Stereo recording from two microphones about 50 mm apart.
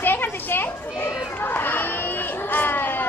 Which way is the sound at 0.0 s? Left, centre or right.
Left.